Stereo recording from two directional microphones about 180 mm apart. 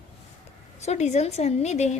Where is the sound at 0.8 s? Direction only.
40° left (ahead or behind).